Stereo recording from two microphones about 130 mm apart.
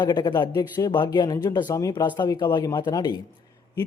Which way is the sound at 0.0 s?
35° left (ahead or behind).